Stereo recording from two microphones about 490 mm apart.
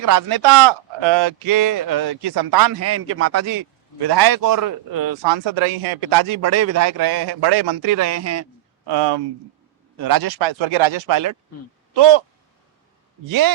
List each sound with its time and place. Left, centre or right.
0.0 s a man's voice: right
5.2 s speech: right
6.2 s a man's voice: right
8.9 s speech: right
10.0 s speech: right
11.1 s a man's voice: right
11.9 s speech: right